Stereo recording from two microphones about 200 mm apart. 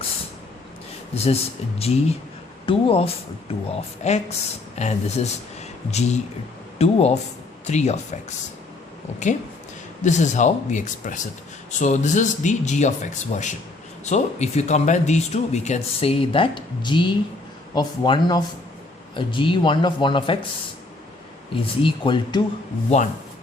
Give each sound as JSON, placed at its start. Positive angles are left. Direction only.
{"t": 1.1, "sound": "speech", "side_deg": 30}
{"t": 10.0, "sound": "speech", "side_deg": 35}
{"t": 21.5, "sound": "speech", "side_deg": 25}